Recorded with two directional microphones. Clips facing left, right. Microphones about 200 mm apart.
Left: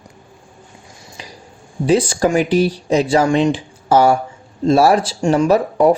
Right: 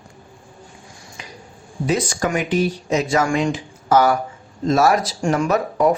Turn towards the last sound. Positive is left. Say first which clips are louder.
# left 5 dB
turn(degrees=30)  # may be behind; listen again after turning